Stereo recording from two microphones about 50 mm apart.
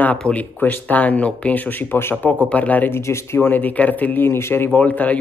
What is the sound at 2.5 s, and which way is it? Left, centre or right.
Speech, left.